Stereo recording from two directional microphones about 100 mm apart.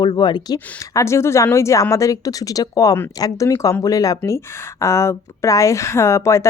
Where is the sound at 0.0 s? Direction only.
50° left (ahead or behind).